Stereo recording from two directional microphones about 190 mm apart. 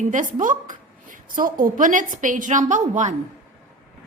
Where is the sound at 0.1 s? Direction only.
45° right (ahead or behind).